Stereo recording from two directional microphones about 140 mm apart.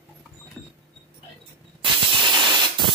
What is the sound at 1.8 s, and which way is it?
Spray, 35° right (ahead or behind).